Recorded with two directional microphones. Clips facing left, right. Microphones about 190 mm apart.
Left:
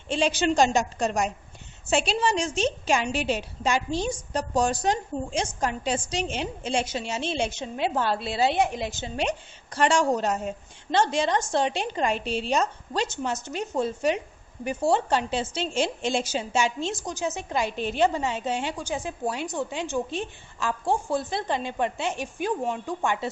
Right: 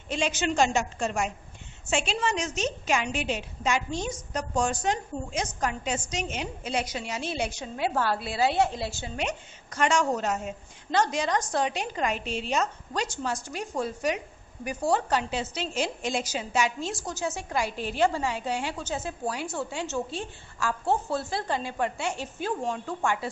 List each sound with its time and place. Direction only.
0.1 s a woman's voice: 30° left (ahead or behind)
9.7 s a woman's voice: 30° left (ahead or behind)